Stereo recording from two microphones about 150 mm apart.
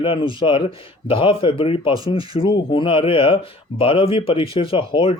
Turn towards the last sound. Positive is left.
turn(degrees=35)  # may be behind; listen again after turning